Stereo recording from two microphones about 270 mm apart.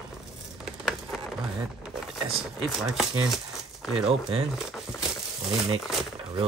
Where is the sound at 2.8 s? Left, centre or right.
Centre.